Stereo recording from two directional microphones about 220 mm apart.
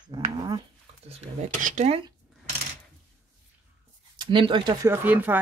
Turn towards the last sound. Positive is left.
turn(degrees=-10)  # may be behind; listen again after turning